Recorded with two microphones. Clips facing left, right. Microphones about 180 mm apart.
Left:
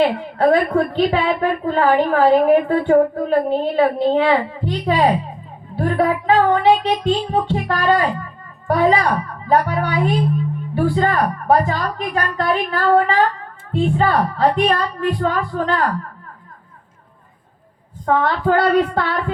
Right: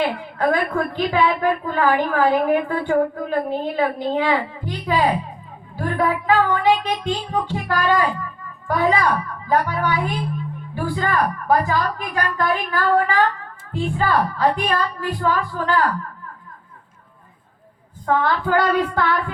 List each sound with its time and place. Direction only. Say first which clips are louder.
0.0 s a woman's voice: left 5 dB; 30° left (ahead or behind)
18.0 s a woman's voice: left 3 dB; 30° left (ahead or behind)